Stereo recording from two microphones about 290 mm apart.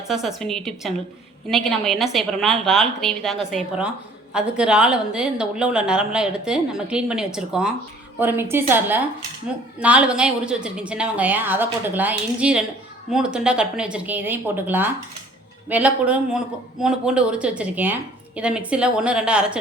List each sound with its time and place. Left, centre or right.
0.1 s a woman's voice: centre